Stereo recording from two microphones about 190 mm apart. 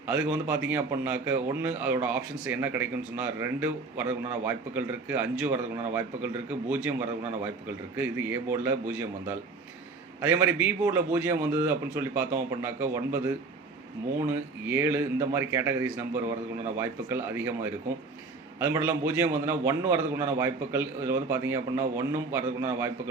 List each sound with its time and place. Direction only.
0.1 s a man's voice: 10° right (ahead or behind)
14.7 s a man's voice: 10° right (ahead or behind)